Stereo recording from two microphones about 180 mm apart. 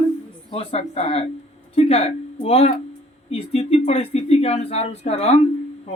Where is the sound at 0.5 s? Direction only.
35° left (ahead or behind).